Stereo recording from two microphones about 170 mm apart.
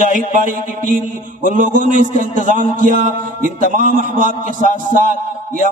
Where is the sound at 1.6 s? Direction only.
50° right (ahead or behind).